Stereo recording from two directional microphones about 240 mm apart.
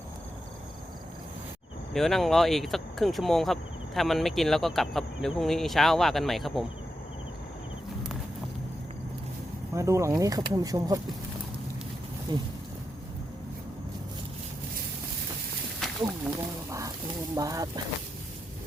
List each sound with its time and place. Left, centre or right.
1.9 s speech: centre
9.7 s speech: centre
12.3 s speech: centre
15.8 s wild animals: centre
17.3 s speech: centre